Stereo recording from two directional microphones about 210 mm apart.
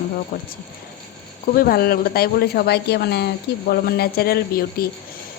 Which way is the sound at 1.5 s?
45° left (ahead or behind).